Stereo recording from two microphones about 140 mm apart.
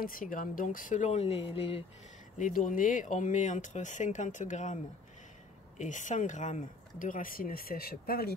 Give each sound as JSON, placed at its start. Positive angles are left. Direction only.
{"t": 0.0, "sound": "speech", "side_deg": 85}
{"t": 2.3, "sound": "speech", "side_deg": 65}
{"t": 5.8, "sound": "speech", "side_deg": 60}